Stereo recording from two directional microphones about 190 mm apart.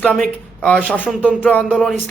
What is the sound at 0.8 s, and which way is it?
Speech, 5° right (ahead or behind).